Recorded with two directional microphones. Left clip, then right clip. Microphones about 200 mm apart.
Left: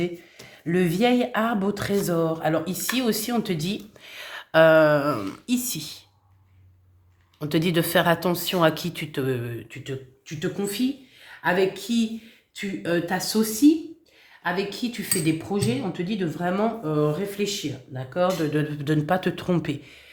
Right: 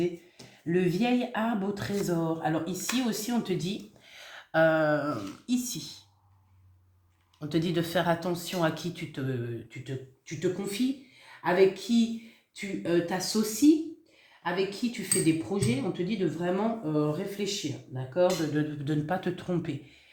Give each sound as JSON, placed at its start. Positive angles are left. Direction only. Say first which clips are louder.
{"t": 0.7, "sound": "speech", "louder": "left 6 dB", "side_deg": 45}
{"t": 7.3, "sound": "speech", "louder": "left 6 dB", "side_deg": 45}